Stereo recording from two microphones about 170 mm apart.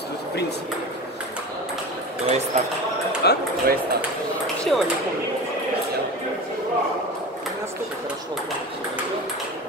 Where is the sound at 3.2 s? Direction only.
75° left (ahead or behind).